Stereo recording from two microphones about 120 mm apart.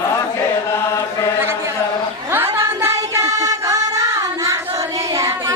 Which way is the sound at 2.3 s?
20° right (ahead or behind).